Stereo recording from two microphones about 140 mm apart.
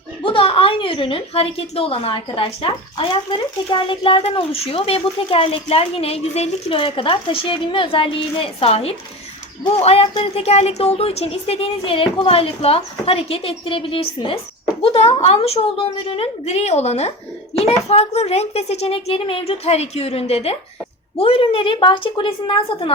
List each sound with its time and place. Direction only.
0.2 s a woman's voice: 40° left (ahead or behind)